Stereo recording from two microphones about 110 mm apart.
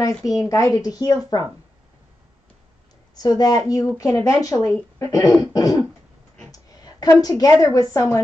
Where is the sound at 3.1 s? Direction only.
35° left (ahead or behind).